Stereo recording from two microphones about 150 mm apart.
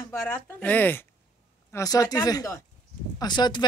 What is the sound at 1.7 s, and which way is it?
Speech, 20° left (ahead or behind).